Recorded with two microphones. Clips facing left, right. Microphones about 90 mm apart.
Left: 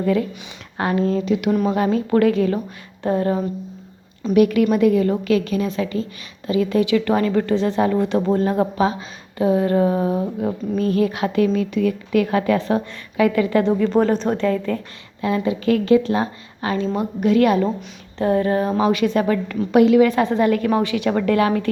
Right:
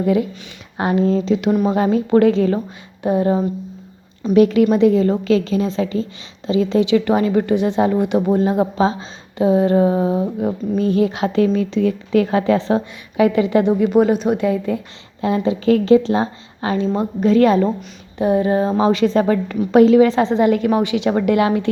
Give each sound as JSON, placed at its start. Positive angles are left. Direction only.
{"t": 0.0, "sound": "a woman's voice", "side_deg": -20}
{"t": 3.0, "sound": "a woman's voice", "side_deg": -15}
{"t": 15.2, "sound": "a woman's voice", "side_deg": -30}
{"t": 18.2, "sound": "a woman's voice", "side_deg": -20}